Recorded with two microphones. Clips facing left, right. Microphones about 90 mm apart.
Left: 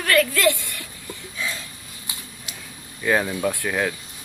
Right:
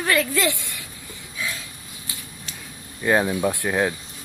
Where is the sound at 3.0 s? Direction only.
15° right (ahead or behind).